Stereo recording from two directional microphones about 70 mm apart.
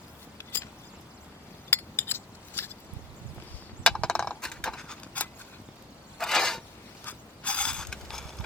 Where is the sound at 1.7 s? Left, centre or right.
Left.